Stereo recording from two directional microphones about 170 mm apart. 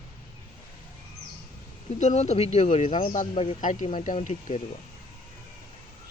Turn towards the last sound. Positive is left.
turn(degrees=45)  # may be behind; listen again after turning